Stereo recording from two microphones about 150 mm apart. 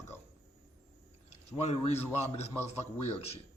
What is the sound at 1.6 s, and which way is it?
Speech, 45° left (ahead or behind).